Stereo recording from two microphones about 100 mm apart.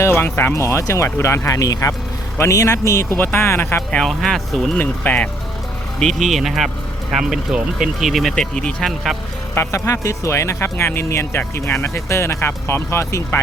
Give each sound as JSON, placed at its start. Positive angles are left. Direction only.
{"t": 0.0, "sound": "speech", "side_deg": 25}
{"t": 3.9, "sound": "speech", "side_deg": 5}
{"t": 4.8, "sound": "speech", "side_deg": 15}
{"t": 6.0, "sound": "speech", "side_deg": 5}
{"t": 9.6, "sound": "speech", "side_deg": 30}